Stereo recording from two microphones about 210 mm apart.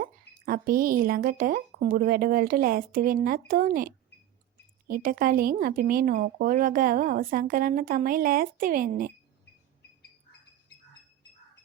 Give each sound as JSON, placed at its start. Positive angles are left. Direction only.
{"t": 0.0, "sound": "speech", "side_deg": -45}